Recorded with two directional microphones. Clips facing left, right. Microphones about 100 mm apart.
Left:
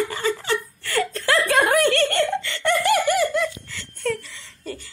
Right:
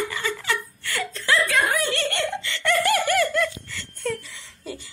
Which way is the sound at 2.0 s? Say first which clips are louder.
Left 5 dB; 40° left (ahead or behind).